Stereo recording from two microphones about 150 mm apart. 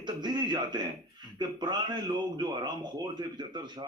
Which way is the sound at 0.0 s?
30° right (ahead or behind).